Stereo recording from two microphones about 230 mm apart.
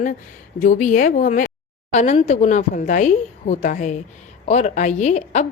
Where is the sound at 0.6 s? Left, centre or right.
Left.